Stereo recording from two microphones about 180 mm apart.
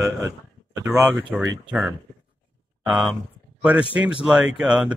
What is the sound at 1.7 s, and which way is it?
Speech, 5° right (ahead or behind).